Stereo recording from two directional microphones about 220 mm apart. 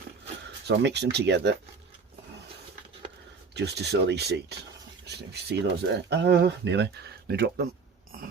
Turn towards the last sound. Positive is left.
turn(degrees=-45)  # may be behind; listen again after turning